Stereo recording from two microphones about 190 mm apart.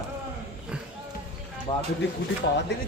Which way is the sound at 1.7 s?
20° left (ahead or behind).